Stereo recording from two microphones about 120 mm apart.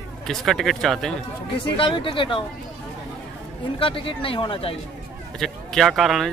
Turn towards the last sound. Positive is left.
turn(degrees=0)  # may be behind; listen again after turning